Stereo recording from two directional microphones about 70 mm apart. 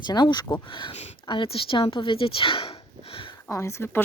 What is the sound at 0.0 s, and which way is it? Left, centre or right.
Speech, left.